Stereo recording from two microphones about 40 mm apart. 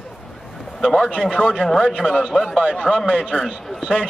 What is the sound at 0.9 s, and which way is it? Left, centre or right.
Speech, centre.